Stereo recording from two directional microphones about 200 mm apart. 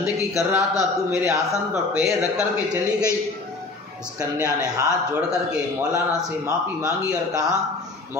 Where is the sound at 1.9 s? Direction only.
Centre (ahead or behind).